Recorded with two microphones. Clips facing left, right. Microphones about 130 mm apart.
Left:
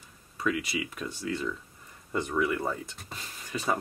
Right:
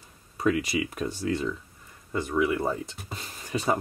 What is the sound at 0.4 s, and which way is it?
Speech, 35° right (ahead or behind).